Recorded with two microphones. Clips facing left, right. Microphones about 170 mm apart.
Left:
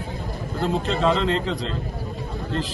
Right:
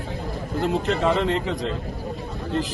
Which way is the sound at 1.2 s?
15° right (ahead or behind).